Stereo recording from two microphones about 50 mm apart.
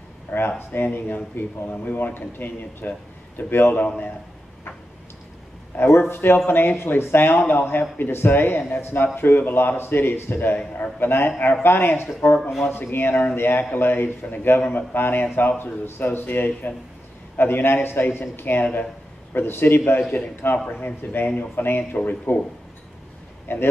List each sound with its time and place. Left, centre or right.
0.3 s speech: left
5.8 s a man's voice: left
12.4 s speech: centre
12.9 s a man's voice: left
23.5 s a man's voice: left